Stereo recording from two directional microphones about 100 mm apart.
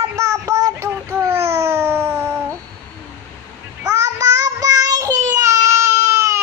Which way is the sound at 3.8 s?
30° right (ahead or behind).